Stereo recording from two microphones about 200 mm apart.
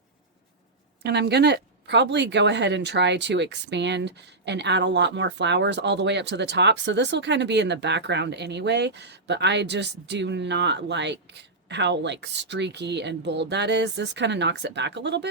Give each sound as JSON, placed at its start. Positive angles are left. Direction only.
{"t": 1.0, "sound": "speech", "side_deg": -60}